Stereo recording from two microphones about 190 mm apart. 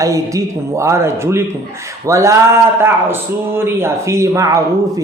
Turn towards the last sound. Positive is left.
turn(degrees=-15)  # may be behind; listen again after turning